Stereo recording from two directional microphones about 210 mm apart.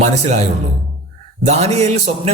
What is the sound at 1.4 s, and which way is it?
Speech, 30° right (ahead or behind).